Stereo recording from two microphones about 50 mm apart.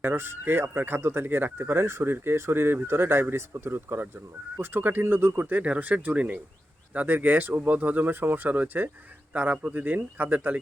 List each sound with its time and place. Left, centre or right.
0.0 s speech: right
5.6 s speech: right
6.9 s speech: right